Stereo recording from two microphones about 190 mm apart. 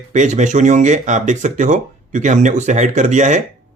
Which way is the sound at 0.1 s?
40° right (ahead or behind).